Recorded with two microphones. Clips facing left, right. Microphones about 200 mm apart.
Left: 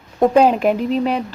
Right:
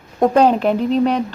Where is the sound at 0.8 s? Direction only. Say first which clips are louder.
Right 2 dB; 35° right (ahead or behind).